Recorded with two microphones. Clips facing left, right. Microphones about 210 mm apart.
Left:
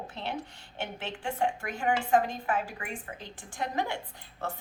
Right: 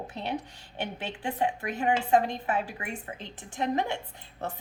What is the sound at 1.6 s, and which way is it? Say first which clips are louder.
Speech: right 2 dB; 20° right (ahead or behind).